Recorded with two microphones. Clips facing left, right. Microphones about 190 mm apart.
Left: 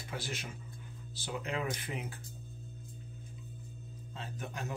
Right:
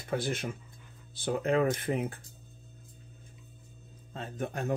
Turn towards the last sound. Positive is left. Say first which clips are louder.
# right 8 dB
turn(degrees=-55)  # may be behind; listen again after turning